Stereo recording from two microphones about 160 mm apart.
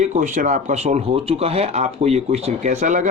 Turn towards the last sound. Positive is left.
turn(degrees=-50)  # may be behind; listen again after turning